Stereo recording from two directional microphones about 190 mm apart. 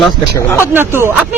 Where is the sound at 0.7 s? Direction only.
10° right (ahead or behind).